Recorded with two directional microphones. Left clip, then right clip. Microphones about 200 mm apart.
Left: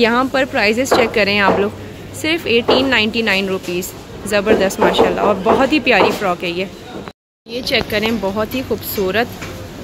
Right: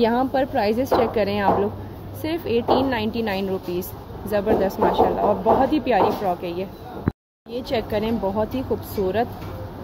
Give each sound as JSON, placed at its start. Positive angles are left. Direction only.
{"t": 0.0, "sound": "a woman's voice", "side_deg": 10}
{"t": 7.7, "sound": "a woman's voice", "side_deg": 15}